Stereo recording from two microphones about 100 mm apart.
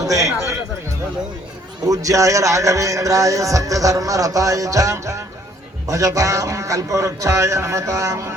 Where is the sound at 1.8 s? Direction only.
35° right (ahead or behind).